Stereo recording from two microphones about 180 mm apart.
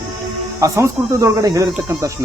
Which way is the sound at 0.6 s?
15° right (ahead or behind).